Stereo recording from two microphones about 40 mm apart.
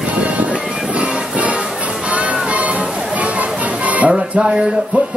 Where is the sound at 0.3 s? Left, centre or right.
Right.